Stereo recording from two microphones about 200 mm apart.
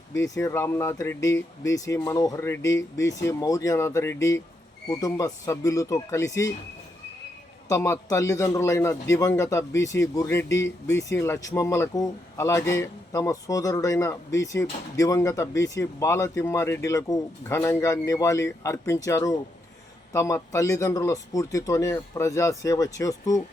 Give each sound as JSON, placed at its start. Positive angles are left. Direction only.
{"t": 0.2, "sound": "a man's voice", "side_deg": 15}
{"t": 7.7, "sound": "a man's voice", "side_deg": 15}